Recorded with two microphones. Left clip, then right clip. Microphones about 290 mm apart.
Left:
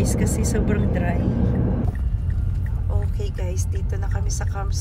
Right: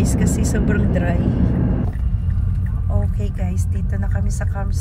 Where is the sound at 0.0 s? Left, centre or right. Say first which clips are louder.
Right 2 dB; left.